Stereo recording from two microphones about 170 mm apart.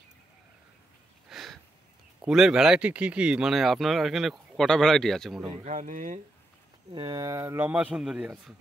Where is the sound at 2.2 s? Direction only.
Centre (ahead or behind).